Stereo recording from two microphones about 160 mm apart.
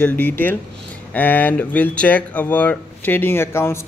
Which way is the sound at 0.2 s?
10° left (ahead or behind).